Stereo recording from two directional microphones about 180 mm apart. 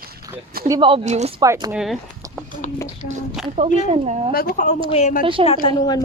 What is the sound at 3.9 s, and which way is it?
Speech, 35° right (ahead or behind).